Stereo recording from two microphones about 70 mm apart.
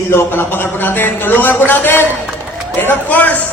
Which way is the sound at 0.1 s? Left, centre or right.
Left.